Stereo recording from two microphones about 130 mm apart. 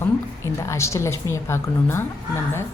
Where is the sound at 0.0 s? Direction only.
20° left (ahead or behind).